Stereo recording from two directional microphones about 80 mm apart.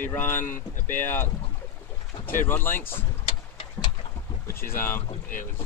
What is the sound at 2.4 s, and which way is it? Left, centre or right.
Speech, left.